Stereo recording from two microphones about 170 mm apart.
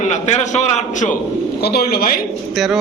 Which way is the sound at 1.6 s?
70° left (ahead or behind).